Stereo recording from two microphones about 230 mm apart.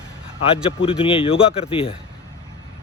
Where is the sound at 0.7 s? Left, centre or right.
Left.